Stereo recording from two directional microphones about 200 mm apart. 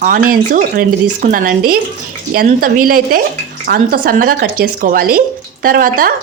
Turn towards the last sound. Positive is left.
turn(degrees=-45)  # may be behind; listen again after turning